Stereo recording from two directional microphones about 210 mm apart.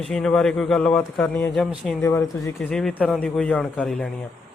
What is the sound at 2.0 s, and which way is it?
Speech, 15° left (ahead or behind).